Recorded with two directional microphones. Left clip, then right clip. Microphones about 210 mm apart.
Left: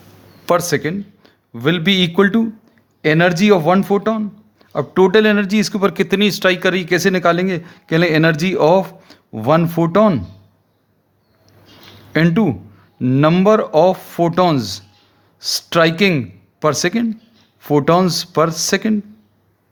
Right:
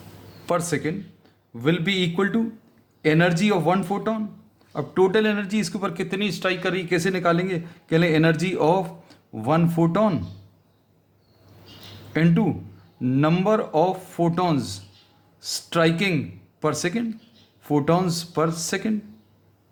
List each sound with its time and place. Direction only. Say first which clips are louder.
0.4 s a man's voice: left 8 dB; 45° left (ahead or behind)
12.1 s speech: left 7 dB; 40° left (ahead or behind)